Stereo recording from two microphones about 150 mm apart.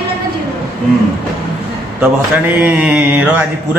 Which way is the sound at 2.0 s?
10° right (ahead or behind).